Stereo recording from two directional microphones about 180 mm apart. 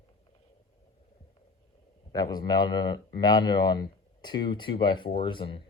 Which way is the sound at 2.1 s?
20° left (ahead or behind).